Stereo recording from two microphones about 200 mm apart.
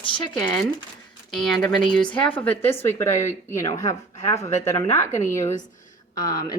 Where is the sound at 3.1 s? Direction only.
35° left (ahead or behind).